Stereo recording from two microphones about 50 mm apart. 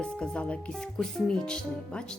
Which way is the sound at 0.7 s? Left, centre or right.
Centre.